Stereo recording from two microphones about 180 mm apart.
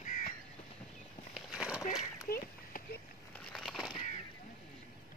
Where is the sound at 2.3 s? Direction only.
55° left (ahead or behind).